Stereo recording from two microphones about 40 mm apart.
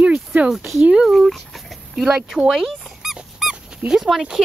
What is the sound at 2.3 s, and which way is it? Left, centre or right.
Dog, centre.